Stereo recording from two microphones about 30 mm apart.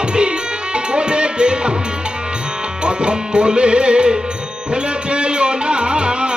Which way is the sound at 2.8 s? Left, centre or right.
Right.